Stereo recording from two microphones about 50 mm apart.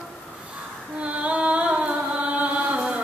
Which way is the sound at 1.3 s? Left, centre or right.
Right.